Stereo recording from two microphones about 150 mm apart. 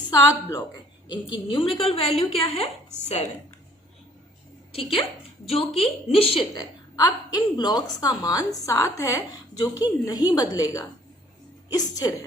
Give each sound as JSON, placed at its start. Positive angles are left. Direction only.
{"t": 0.1, "sound": "a woman's voice", "side_deg": 25}
{"t": 1.1, "sound": "a woman's voice", "side_deg": 35}
{"t": 4.7, "sound": "a woman's voice", "side_deg": 35}
{"t": 6.5, "sound": "a woman's voice", "side_deg": 25}